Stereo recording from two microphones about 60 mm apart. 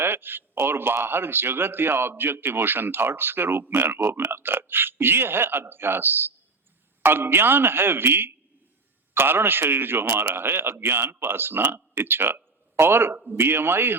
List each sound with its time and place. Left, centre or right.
0.0 s a man's voice: right